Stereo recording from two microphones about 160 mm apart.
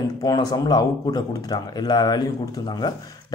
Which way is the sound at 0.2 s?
25° left (ahead or behind).